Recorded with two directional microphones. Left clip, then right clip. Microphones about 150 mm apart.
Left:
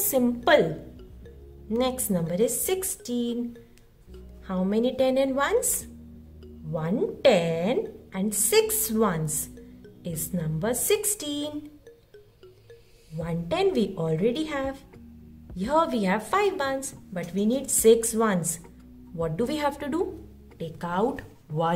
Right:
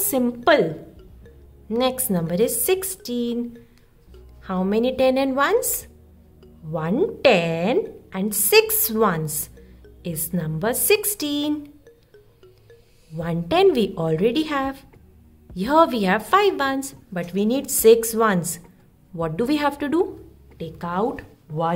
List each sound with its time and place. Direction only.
0.0 s a woman's voice: 25° right (ahead or behind)
1.7 s a woman's voice: 35° right (ahead or behind)
4.5 s a woman's voice: 45° right (ahead or behind)
13.2 s a woman's voice: 45° right (ahead or behind)
20.5 s speech: 20° right (ahead or behind)